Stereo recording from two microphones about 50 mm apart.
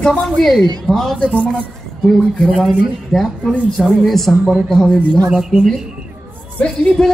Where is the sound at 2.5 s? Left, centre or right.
Centre.